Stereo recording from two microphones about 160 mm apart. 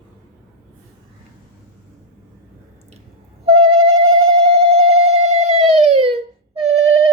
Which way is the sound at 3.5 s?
40° right (ahead or behind).